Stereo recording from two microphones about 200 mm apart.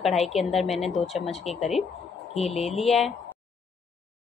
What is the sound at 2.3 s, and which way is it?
Speech, 30° left (ahead or behind).